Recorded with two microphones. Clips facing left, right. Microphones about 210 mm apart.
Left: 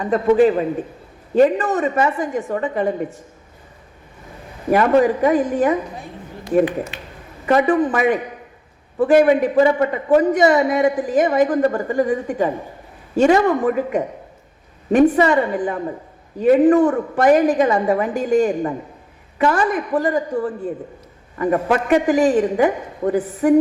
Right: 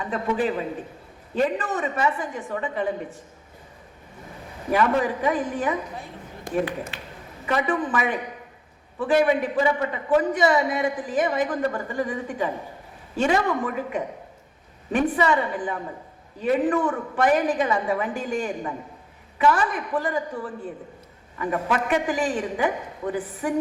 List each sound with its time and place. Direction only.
0.0 s a man's voice: 45° left (ahead or behind)
4.7 s a man's voice: 45° left (ahead or behind)
6.9 s a sound: 20° left (ahead or behind)
7.4 s a man's voice: 45° left (ahead or behind)